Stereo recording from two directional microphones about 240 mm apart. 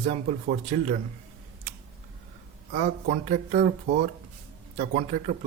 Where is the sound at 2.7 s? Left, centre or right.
Right.